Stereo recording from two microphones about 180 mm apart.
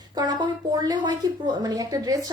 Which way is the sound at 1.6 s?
20° right (ahead or behind).